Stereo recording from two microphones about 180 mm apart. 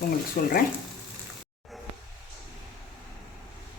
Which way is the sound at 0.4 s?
55° left (ahead or behind).